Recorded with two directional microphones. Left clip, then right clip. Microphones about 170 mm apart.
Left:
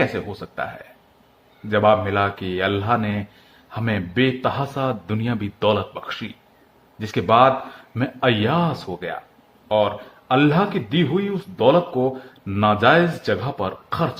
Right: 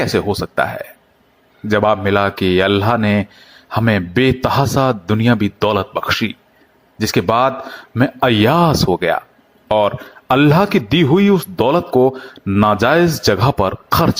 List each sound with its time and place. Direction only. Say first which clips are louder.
0.0 s speech: right 6 dB; 40° right (ahead or behind)